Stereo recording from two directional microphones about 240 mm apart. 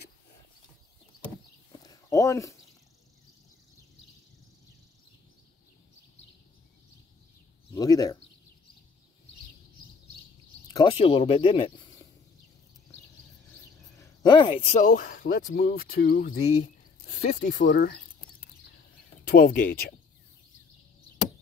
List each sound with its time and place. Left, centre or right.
1.7 s a sound: centre
7.7 s speech: centre
10.7 s speech: centre
14.2 s speech: centre
17.6 s speech: left
19.3 s speech: left